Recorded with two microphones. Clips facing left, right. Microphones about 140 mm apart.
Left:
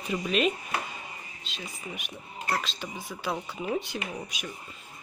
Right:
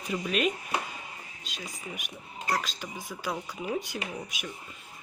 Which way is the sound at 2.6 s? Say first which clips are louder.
Left 1 dB; 5° right (ahead or behind).